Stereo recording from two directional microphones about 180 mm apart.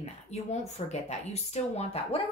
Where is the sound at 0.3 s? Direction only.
40° left (ahead or behind).